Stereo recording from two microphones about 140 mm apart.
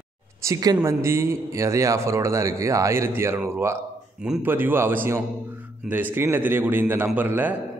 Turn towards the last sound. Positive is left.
turn(degrees=-15)  # may be behind; listen again after turning